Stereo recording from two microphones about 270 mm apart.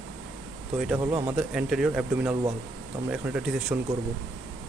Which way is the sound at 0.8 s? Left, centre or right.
Centre.